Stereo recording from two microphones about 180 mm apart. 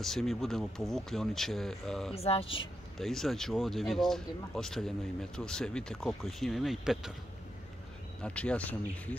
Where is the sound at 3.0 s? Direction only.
Centre (ahead or behind).